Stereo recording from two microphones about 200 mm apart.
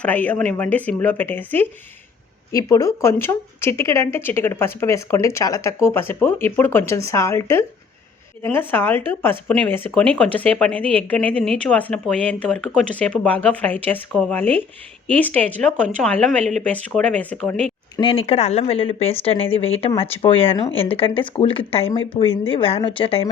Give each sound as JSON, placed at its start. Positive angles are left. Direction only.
{"t": 0.0, "sound": "speech", "side_deg": 10}
{"t": 17.9, "sound": "speech", "side_deg": 25}